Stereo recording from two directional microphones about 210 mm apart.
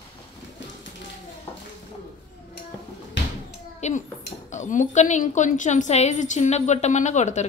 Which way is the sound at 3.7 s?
35° left (ahead or behind).